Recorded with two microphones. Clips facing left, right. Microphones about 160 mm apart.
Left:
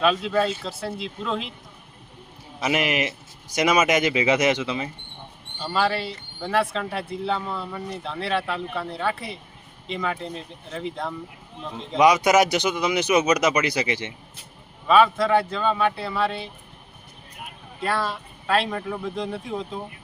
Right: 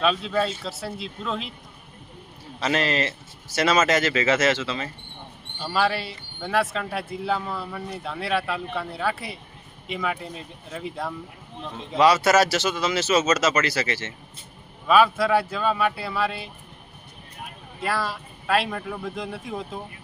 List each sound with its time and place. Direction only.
0.0 s speech: centre (ahead or behind)
2.6 s speech: 15° left (ahead or behind)
5.5 s speech: centre (ahead or behind)
11.9 s speech: 15° left (ahead or behind)
14.8 s speech: centre (ahead or behind)
17.8 s speech: centre (ahead or behind)